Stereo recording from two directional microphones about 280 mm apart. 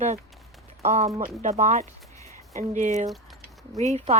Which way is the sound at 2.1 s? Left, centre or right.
Centre.